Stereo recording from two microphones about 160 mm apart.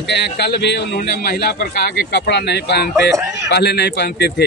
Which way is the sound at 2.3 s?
90° left.